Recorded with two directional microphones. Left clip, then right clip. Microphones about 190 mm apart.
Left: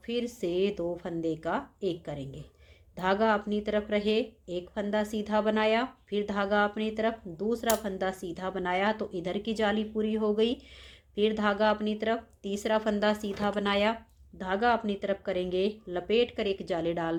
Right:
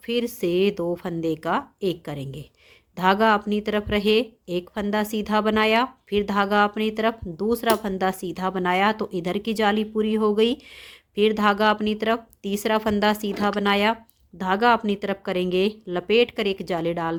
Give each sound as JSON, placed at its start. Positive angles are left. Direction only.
{"t": 0.0, "sound": "speech", "side_deg": -45}